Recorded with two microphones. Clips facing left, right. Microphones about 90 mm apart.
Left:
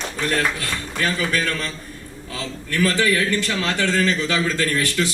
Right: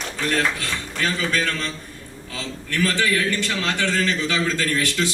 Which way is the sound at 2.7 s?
20° left (ahead or behind).